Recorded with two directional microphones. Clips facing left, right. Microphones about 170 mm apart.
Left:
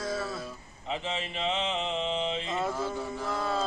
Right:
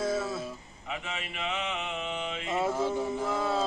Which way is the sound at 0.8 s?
30° left (ahead or behind).